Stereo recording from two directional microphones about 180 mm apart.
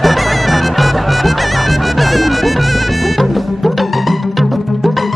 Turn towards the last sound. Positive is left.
turn(degrees=0)  # may be behind; listen again after turning